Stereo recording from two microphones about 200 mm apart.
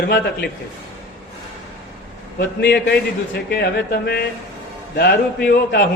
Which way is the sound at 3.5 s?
55° left (ahead or behind).